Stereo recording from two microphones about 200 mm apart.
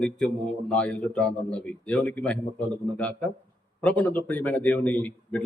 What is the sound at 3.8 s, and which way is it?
A man's voice, 5° left (ahead or behind).